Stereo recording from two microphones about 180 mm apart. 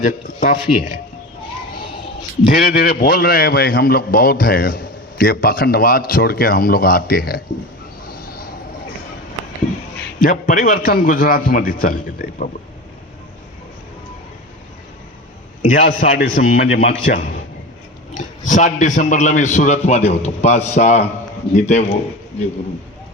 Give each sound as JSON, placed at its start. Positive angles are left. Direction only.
{"t": 0.0, "sound": "a man's voice", "side_deg": 50}
{"t": 2.5, "sound": "a man's voice", "side_deg": 50}
{"t": 10.2, "sound": "a man's voice", "side_deg": 50}
{"t": 15.7, "sound": "a man's voice", "side_deg": 50}